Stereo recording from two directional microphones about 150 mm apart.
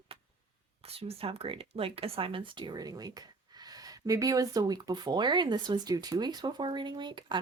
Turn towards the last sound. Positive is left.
turn(degrees=-30)  # may be behind; listen again after turning